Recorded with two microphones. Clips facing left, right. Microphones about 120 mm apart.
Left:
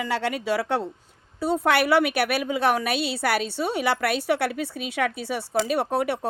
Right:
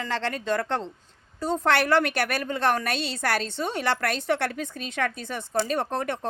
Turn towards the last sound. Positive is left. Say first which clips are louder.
# left 3 dB
turn(degrees=10)  # may be behind; listen again after turning